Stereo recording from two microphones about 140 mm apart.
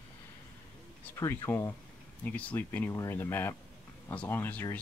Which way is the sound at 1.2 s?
20° left (ahead or behind).